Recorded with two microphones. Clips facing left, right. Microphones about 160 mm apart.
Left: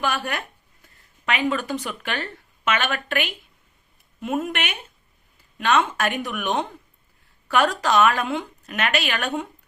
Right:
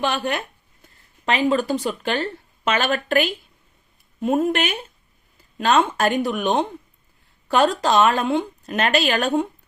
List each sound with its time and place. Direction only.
0.0 s speech: 25° right (ahead or behind)